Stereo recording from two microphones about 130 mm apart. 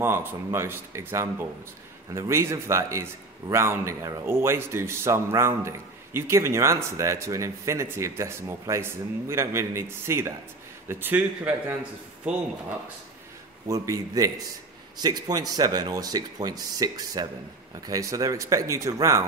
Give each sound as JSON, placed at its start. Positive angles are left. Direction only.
{"t": 0.0, "sound": "a man's voice", "side_deg": -15}
{"t": 13.7, "sound": "a man's voice", "side_deg": -25}